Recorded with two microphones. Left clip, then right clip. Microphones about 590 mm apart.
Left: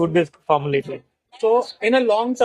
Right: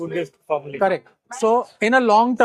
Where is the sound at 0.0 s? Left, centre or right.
Left.